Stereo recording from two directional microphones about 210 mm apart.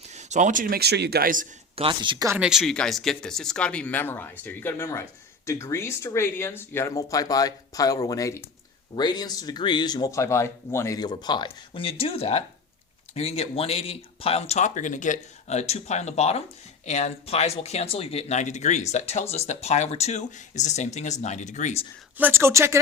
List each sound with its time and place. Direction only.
0.1 s speech: 35° right (ahead or behind)
1.7 s speech: 25° right (ahead or behind)
2.4 s speech: centre (ahead or behind); by 21.8 s 35° left (ahead or behind)
22.2 s speech: 10° right (ahead or behind)